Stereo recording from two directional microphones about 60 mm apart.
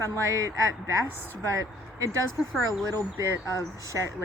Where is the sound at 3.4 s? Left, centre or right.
Left.